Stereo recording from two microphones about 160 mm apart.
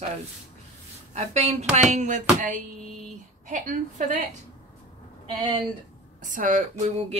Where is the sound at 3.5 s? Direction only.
50° right (ahead or behind).